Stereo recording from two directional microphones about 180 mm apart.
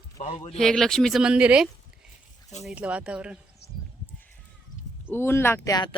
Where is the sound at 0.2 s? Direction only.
35° left (ahead or behind).